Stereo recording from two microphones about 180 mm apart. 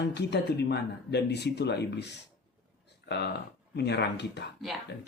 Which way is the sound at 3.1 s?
70° left (ahead or behind).